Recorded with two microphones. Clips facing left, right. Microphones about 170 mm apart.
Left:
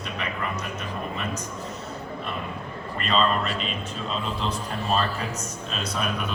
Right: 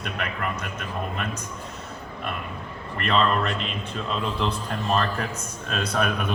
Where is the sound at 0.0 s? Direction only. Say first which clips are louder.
Right 1 dB; 55° right (ahead or behind).